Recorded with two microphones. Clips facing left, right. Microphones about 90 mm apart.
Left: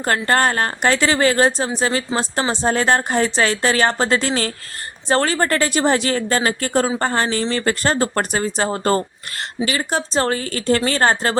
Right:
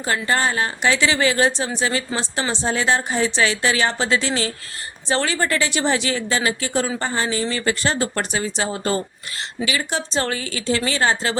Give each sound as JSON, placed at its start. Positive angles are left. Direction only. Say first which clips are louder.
{"t": 0.0, "sound": "a woman's voice", "louder": "left 4 dB", "side_deg": 55}